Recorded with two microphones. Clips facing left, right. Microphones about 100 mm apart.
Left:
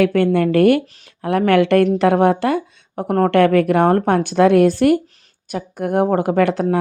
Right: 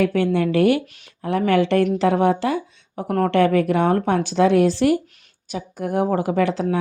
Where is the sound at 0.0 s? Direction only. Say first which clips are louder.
Left 4 dB; 55° left (ahead or behind).